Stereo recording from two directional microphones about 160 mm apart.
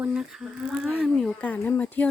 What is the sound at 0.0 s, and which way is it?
Speech, 5° right (ahead or behind).